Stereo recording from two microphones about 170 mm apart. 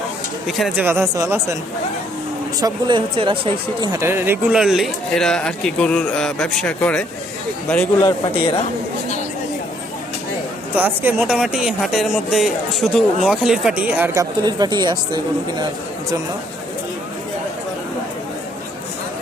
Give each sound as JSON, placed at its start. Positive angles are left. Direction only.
{"t": 0.4, "sound": "speech", "side_deg": 0}
{"t": 0.9, "sound": "speech", "side_deg": -15}
{"t": 2.6, "sound": "speech", "side_deg": -25}
{"t": 4.0, "sound": "speech", "side_deg": -15}
{"t": 8.0, "sound": "speech", "side_deg": 30}
{"t": 10.8, "sound": "speech", "side_deg": -10}